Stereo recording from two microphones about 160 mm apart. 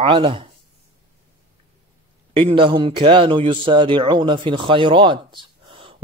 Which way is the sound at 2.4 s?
35° right (ahead or behind).